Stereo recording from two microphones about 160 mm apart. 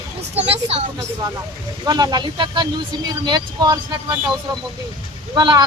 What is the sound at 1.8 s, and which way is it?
A man's voice, 25° right (ahead or behind).